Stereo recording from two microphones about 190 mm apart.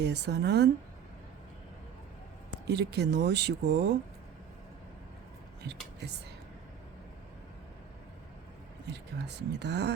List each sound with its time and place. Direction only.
0.0 s speech: 60° right (ahead or behind)
2.6 s speech: 60° right (ahead or behind)
8.9 s speech: 65° right (ahead or behind)